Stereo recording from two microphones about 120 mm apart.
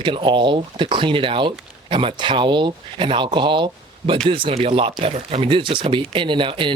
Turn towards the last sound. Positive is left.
turn(degrees=-45)  # may be behind; listen again after turning